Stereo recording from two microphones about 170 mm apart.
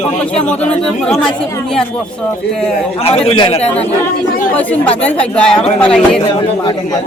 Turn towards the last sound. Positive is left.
turn(degrees=5)  # may be behind; listen again after turning